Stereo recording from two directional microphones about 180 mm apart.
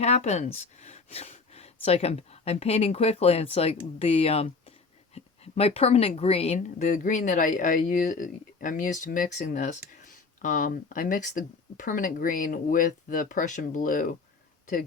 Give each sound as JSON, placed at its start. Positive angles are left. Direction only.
{"t": 0.0, "sound": "a woman's voice", "side_deg": 40}